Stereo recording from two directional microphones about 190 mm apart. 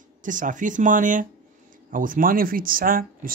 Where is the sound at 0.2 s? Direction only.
45° right (ahead or behind).